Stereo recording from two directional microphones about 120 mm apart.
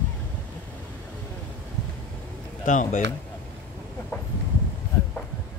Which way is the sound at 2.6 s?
90° left.